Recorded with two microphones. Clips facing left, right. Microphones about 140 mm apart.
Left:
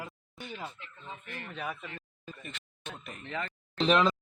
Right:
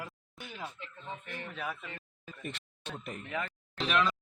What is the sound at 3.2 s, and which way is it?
Speech, 10° right (ahead or behind).